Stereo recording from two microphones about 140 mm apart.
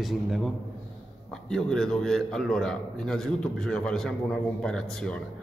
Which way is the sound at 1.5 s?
5° left (ahead or behind).